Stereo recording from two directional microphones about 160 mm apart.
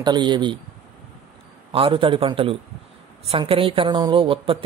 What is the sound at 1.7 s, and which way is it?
A woman's voice, 35° right (ahead or behind).